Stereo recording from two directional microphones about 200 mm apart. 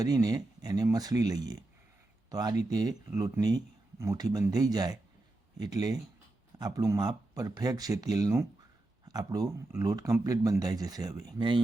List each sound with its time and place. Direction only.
0.0 s speech: 20° right (ahead or behind)